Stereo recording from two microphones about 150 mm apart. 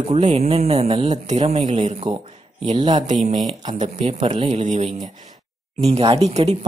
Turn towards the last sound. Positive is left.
turn(degrees=-45)  # may be behind; listen again after turning